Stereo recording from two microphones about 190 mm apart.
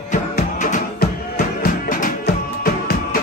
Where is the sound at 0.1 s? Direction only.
40° left (ahead or behind).